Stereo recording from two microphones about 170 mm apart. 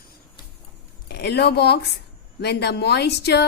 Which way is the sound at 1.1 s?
75° left (ahead or behind).